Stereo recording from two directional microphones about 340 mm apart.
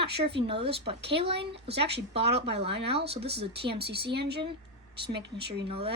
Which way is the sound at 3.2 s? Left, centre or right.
Right.